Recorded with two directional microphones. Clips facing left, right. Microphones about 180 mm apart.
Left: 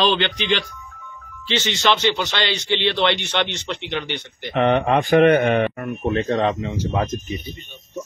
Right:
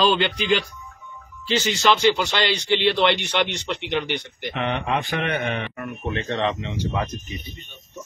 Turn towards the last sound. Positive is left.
turn(degrees=40)  # may be behind; listen again after turning